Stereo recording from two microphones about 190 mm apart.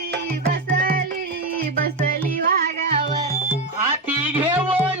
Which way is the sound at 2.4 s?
45° right (ahead or behind).